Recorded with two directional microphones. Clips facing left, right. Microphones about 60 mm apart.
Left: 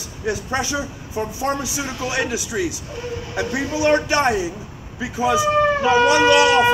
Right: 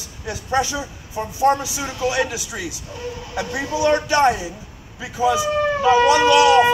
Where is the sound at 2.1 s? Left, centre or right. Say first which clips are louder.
Right 1 dB; left.